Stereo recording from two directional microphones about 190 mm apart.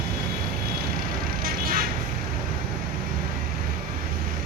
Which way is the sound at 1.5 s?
50° right (ahead or behind).